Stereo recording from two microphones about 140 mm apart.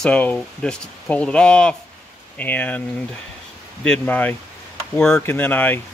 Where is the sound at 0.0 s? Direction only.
10° left (ahead or behind).